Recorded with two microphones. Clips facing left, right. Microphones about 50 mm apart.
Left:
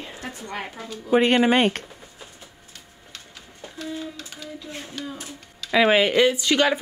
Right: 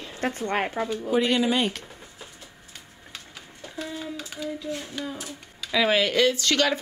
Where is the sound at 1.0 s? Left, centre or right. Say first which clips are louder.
Left 6 dB; left.